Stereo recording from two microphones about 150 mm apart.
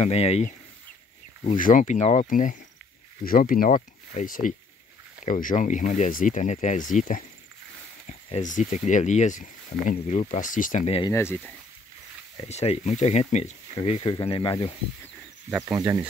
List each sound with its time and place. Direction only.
0.0 s speech: 45° left (ahead or behind)
1.4 s speech: 60° left (ahead or behind)
3.3 s speech: 70° left (ahead or behind)
11.1 s speech: 15° left (ahead or behind)
12.4 s speech: 45° left (ahead or behind)
15.6 s speech: 20° right (ahead or behind)